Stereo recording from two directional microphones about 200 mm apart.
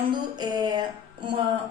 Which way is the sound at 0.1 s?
20° right (ahead or behind).